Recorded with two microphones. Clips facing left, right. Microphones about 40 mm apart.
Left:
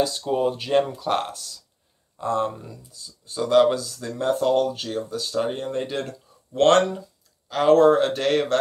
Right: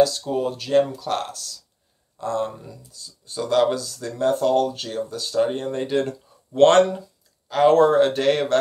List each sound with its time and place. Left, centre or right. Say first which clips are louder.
0.3 s speech: even; centre